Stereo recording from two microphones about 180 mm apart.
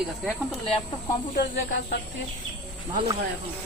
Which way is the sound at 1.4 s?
75° left (ahead or behind).